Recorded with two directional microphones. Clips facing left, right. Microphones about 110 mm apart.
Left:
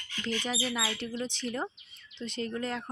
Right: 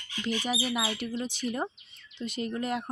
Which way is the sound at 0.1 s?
15° right (ahead or behind).